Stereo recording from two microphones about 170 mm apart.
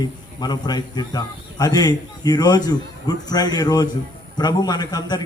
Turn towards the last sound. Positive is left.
turn(degrees=25)  # may be behind; listen again after turning